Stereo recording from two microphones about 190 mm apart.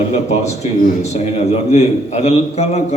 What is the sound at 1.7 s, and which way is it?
A man's voice, 35° left (ahead or behind).